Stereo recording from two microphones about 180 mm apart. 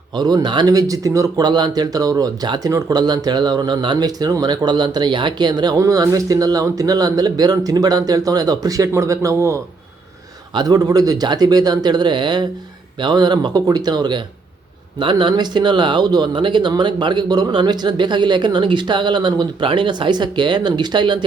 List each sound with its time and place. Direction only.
0.2 s speech: 20° right (ahead or behind)